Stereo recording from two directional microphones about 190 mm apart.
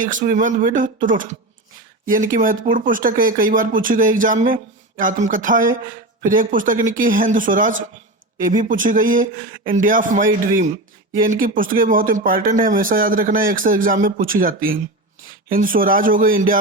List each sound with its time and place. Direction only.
0.0 s speech: 45° right (ahead or behind)